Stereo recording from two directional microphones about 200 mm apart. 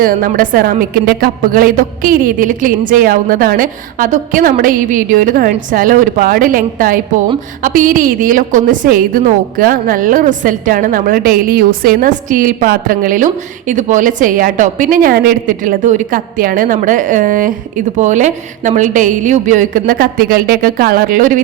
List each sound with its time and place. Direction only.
0.0 s a woman's voice: 45° right (ahead or behind)